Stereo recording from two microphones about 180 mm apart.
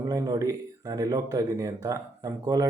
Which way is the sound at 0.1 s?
20° right (ahead or behind).